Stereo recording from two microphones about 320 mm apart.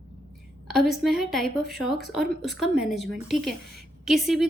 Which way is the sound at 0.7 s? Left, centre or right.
Centre.